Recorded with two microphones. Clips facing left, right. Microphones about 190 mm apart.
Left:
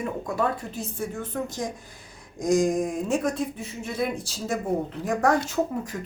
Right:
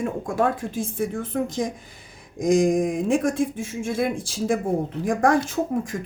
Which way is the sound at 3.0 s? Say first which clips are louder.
Right 4 dB; 50° right (ahead or behind).